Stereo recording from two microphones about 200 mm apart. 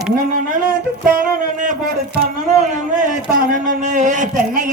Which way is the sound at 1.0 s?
45° right (ahead or behind).